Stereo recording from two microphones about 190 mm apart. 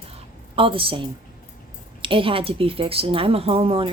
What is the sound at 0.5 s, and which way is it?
A woman's voice, 30° right (ahead or behind).